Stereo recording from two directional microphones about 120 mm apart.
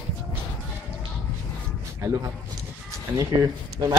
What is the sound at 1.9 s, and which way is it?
Speech, 25° right (ahead or behind).